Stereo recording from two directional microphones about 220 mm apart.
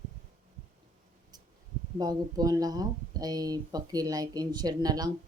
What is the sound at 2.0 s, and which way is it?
Speech, 15° right (ahead or behind).